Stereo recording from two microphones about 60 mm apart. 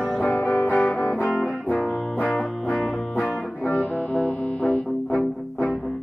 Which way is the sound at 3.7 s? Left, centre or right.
Left.